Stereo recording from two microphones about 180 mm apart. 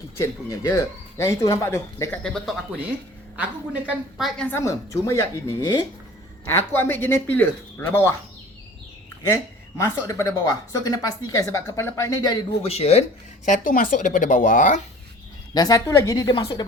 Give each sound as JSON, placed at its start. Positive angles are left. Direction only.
{"t": 0.2, "sound": "speech", "side_deg": 15}
{"t": 3.8, "sound": "a woman's voice", "side_deg": 0}
{"t": 4.4, "sound": "speech", "side_deg": 15}
{"t": 9.2, "sound": "speech", "side_deg": 15}
{"t": 12.6, "sound": "speech", "side_deg": 35}
{"t": 15.5, "sound": "a woman's voice", "side_deg": 20}